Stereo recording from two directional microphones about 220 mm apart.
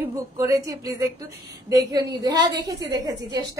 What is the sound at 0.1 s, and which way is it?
A woman's voice, 15° right (ahead or behind).